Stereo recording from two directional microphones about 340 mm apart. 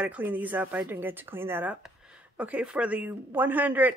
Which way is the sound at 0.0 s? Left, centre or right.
Centre.